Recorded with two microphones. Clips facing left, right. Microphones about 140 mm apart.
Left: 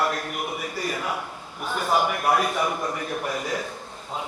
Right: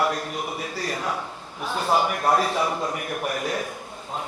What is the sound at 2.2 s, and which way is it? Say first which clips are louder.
Speech: right 1 dB; 30° right (ahead or behind).